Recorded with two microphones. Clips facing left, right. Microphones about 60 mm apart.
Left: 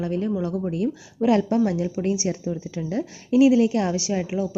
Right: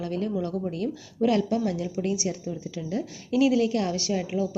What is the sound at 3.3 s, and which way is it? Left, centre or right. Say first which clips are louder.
Speech: left 5 dB; left.